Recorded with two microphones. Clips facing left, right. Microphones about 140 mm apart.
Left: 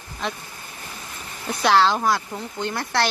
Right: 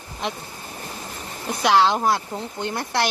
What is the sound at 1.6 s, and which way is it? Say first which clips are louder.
Speech: even; 15° right (ahead or behind).